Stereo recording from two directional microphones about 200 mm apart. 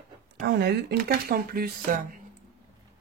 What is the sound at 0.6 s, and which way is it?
Speech, 55° right (ahead or behind).